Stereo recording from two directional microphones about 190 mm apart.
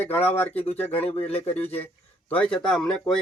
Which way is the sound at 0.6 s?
35° left (ahead or behind).